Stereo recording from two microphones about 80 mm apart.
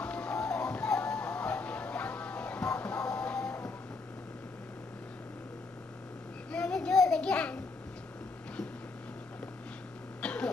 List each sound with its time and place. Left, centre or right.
0.0 s music: centre
6.5 s a sound: centre
10.2 s throat clearing: centre